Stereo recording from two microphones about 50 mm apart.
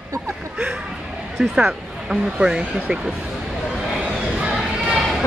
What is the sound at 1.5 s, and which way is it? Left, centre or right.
Speech, centre.